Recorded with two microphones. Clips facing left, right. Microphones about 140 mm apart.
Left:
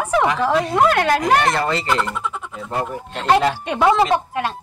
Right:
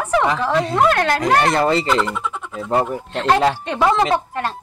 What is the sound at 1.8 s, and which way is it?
A woman's voice, centre (ahead or behind).